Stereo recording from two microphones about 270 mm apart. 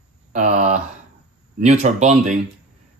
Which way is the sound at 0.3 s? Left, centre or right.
Right.